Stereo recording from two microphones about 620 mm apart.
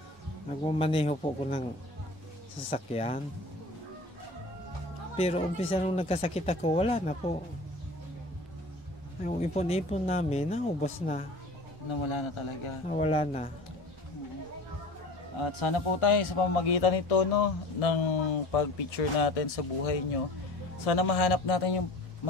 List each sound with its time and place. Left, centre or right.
0.7 s speech: centre
2.7 s speech: centre
5.1 s speech: centre
9.2 s speech: centre
11.9 s speech: left
12.8 s speech: centre
15.4 s speech: left